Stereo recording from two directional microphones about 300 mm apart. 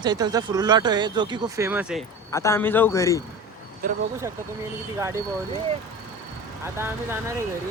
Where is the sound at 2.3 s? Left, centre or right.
Centre.